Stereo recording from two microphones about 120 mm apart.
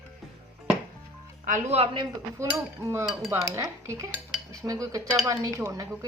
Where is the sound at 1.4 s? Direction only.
80° right.